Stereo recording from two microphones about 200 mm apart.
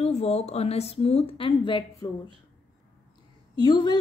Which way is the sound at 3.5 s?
20° left (ahead or behind).